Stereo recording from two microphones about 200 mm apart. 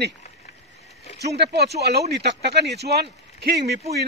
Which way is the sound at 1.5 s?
55° right (ahead or behind).